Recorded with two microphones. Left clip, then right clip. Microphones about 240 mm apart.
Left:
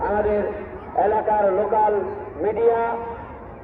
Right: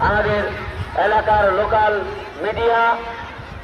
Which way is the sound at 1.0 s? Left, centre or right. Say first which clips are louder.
Right 4 dB; centre.